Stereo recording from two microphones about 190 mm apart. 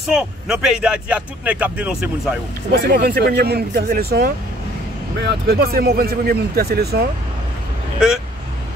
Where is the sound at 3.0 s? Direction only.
55° right (ahead or behind).